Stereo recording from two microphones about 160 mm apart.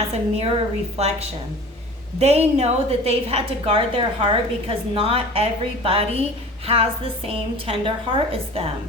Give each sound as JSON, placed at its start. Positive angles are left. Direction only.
{"t": 0.1, "sound": "a woman's voice", "side_deg": -40}